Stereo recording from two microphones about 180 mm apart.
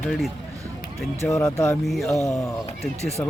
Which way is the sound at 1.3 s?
15° left (ahead or behind).